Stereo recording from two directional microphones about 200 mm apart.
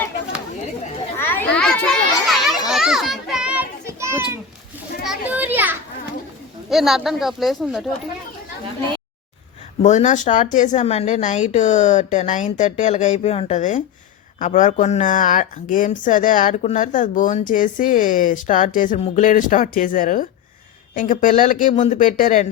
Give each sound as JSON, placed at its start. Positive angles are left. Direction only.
{"t": 1.1, "sound": "children playing", "side_deg": 10}
{"t": 6.7, "sound": "speech", "side_deg": 0}
{"t": 9.8, "sound": "speech", "side_deg": 35}